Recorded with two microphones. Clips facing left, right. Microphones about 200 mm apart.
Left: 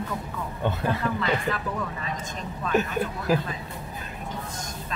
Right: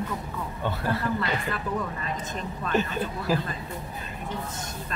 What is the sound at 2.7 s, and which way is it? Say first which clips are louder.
Speech: left 2 dB; 10° left (ahead or behind).